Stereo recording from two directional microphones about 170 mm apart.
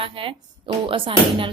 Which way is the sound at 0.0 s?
30° right (ahead or behind).